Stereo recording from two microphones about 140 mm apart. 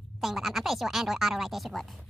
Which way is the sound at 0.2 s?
Centre (ahead or behind).